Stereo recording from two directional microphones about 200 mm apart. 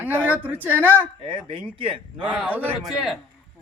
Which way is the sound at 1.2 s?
25° right (ahead or behind).